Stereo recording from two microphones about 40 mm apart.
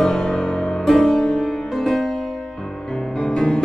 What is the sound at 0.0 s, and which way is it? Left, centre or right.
Music, centre.